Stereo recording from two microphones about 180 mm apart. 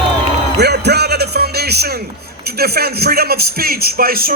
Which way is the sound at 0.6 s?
65° right (ahead or behind).